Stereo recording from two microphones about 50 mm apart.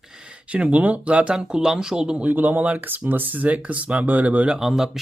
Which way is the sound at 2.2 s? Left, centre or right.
Right.